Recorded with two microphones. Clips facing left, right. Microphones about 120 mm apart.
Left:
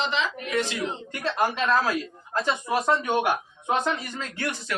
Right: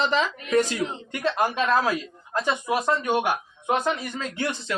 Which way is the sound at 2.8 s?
Centre (ahead or behind).